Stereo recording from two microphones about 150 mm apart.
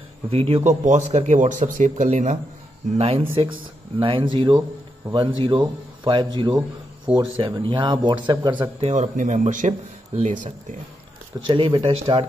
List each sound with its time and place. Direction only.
0.3 s a man's voice: 40° right (ahead or behind)
3.0 s speech: 40° right (ahead or behind)
8.9 s speech: 55° right (ahead or behind)
11.4 s speech: 35° right (ahead or behind)